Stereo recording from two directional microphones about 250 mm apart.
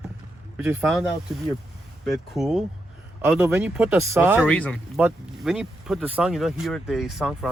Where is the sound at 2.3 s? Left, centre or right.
Centre.